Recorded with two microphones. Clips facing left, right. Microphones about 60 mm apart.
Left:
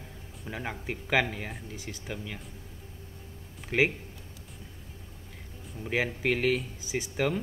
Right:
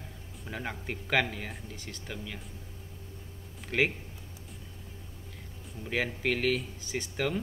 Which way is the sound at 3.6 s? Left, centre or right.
Centre.